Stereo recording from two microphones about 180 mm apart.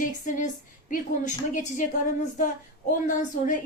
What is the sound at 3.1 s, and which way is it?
Speech, 45° left (ahead or behind).